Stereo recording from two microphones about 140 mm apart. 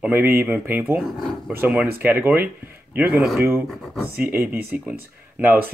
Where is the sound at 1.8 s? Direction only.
15° right (ahead or behind).